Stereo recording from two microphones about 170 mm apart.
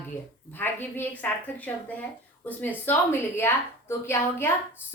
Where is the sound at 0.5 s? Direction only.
10° left (ahead or behind).